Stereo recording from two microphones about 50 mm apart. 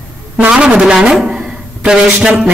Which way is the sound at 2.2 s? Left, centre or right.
Centre.